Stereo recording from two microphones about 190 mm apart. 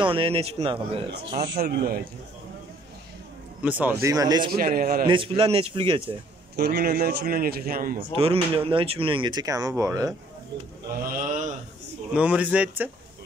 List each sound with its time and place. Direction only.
0.0 s a man's voice: 30° right (ahead or behind)
1.6 s a man's voice: 50° right (ahead or behind)
3.6 s speech: 10° right (ahead or behind)
4.5 s a man's voice: 50° right (ahead or behind)
5.0 s speech: 25° right (ahead or behind)
6.5 s a man's voice: 55° right (ahead or behind)
8.2 s speech: 30° right (ahead or behind)
11.1 s a man's voice: 45° right (ahead or behind)
12.1 s speech: 5° right (ahead or behind)